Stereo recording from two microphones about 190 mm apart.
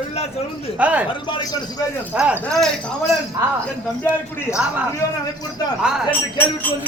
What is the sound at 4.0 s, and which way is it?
Speech, 15° left (ahead or behind).